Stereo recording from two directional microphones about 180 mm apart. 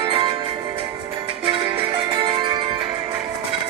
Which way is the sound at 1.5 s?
30° right (ahead or behind).